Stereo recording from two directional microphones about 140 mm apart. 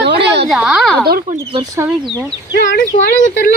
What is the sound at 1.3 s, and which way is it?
Speech, 75° right (ahead or behind).